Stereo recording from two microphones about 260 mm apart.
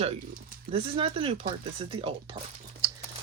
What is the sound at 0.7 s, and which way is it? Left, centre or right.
Speech, right.